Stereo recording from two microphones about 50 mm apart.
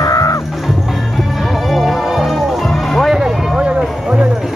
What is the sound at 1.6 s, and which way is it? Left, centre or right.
Music, centre.